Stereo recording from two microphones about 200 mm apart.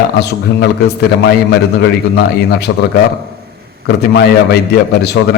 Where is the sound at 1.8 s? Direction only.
55° left (ahead or behind).